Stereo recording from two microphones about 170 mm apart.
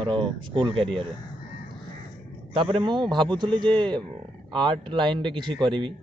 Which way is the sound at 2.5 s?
30° right (ahead or behind).